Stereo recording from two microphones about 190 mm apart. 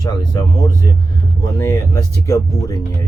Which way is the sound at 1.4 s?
15° left (ahead or behind).